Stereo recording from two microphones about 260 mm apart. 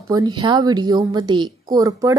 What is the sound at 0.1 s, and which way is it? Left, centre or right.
A woman's voice, centre.